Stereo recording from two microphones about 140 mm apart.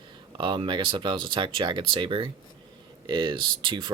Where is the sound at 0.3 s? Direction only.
35° right (ahead or behind).